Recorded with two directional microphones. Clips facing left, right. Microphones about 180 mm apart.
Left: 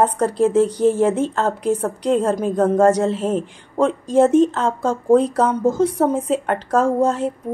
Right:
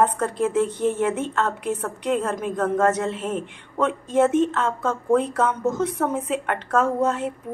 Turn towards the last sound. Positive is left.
turn(degrees=35)  # may be behind; listen again after turning